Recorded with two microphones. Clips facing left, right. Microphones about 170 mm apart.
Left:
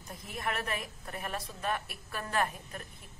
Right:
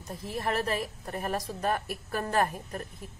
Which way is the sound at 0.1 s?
35° right (ahead or behind).